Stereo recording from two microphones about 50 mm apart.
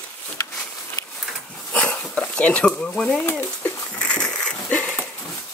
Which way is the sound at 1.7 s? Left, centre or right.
Left.